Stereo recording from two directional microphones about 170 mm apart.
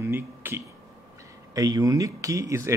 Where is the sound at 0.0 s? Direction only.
15° right (ahead or behind).